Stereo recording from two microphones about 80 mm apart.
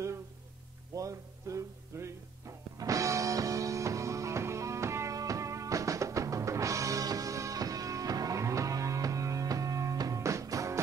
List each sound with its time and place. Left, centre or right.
0.9 s music: right